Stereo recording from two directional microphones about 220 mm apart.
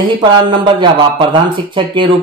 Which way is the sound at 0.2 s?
20° right (ahead or behind).